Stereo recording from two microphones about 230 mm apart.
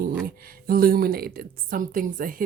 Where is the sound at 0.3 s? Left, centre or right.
Right.